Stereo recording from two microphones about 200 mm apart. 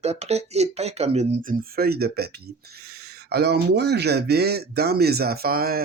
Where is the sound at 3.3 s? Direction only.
55° right (ahead or behind).